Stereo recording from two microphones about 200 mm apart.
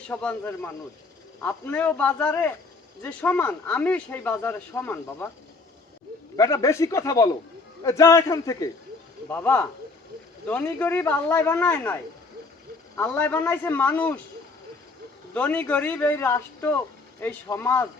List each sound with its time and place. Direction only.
0.1 s speech: 10° left (ahead or behind)
6.3 s speech: 15° left (ahead or behind)
13.0 s speech: 10° left (ahead or behind)
15.3 s speech: 10° left (ahead or behind)